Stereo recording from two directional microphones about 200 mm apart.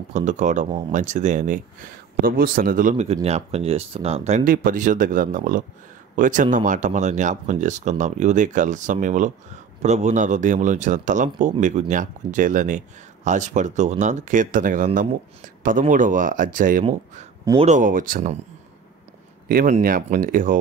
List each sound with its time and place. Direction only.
0.1 s speech: 40° right (ahead or behind)
19.4 s speech: 50° right (ahead or behind)